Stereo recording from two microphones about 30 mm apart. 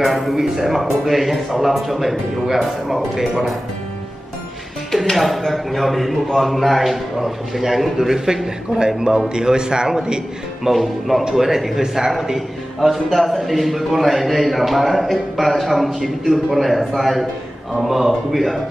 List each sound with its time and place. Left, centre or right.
0.0 s a man's voice: centre
5.1 s a man's voice: centre
8.7 s a man's voice: right
10.7 s a man's voice: centre